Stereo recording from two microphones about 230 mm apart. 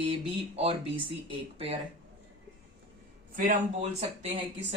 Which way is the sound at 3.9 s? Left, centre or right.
Right.